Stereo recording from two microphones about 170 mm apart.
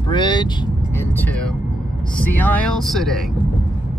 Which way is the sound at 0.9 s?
10° left (ahead or behind).